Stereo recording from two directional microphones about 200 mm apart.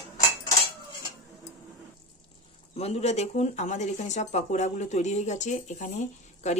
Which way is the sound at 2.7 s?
30° left (ahead or behind).